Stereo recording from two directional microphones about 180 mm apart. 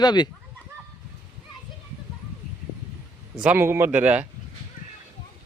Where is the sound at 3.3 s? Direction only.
5° right (ahead or behind).